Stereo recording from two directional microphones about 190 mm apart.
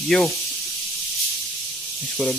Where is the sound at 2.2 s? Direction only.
5° left (ahead or behind).